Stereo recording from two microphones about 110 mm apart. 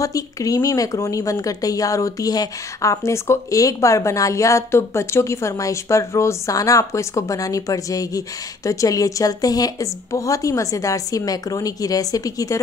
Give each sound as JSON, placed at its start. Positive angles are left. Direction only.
{"t": 0.0, "sound": "a woman's voice", "side_deg": 30}